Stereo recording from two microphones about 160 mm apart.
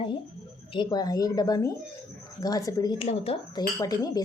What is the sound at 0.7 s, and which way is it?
Speech, 25° left (ahead or behind).